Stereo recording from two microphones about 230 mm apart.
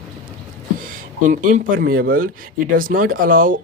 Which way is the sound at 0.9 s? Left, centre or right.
Right.